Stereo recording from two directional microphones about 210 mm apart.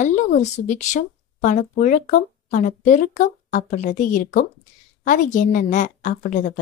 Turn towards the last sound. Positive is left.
turn(degrees=35)  # may be behind; listen again after turning